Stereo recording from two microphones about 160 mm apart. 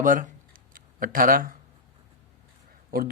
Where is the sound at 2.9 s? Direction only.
65° right (ahead or behind).